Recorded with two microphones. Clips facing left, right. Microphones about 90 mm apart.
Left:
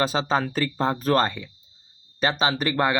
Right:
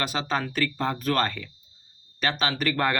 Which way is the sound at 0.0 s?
30° left (ahead or behind).